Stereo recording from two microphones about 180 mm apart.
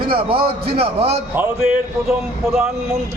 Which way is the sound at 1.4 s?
10° right (ahead or behind).